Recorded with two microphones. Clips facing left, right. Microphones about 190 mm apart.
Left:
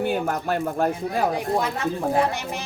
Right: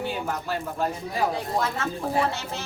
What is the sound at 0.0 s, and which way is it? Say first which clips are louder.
Speech: left 6 dB; 55° left (ahead or behind).